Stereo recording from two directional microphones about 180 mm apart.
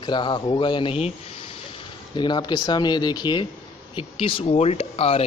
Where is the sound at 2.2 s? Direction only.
25° left (ahead or behind).